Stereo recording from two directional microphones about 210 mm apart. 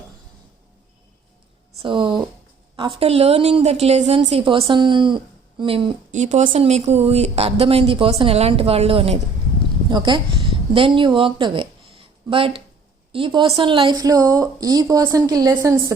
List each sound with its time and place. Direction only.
1.8 s a woman's voice: 25° right (ahead or behind)
6.1 s a woman's voice: 35° right (ahead or behind); by 15.7 s 15° right (ahead or behind)